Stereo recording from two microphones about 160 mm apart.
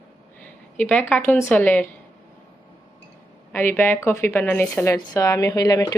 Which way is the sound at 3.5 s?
15° left (ahead or behind).